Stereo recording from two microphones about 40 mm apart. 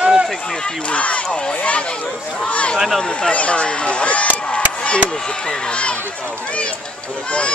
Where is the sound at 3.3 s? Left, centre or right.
Left.